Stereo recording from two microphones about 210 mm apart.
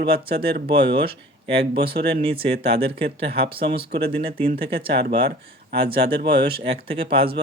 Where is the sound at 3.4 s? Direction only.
25° right (ahead or behind).